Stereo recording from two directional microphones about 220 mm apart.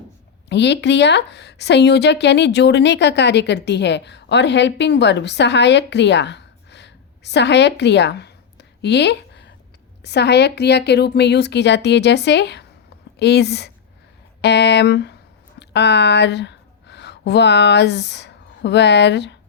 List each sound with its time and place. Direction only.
0.4 s a woman's voice: 50° left (ahead or behind)